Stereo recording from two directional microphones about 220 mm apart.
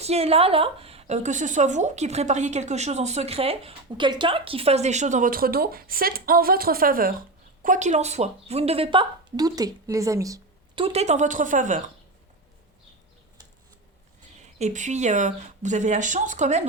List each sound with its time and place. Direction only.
0.0 s a woman's voice: 30° right (ahead or behind)
14.6 s a woman's voice: 35° right (ahead or behind)